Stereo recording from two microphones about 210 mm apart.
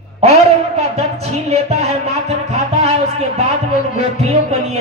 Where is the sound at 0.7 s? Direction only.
30° right (ahead or behind).